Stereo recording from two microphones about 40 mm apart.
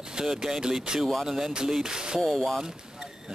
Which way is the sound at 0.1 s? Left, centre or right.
Centre.